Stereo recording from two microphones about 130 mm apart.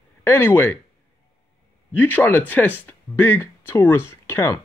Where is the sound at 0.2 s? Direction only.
15° left (ahead or behind).